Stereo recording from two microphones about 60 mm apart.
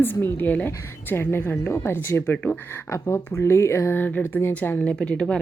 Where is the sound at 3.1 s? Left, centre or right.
Left.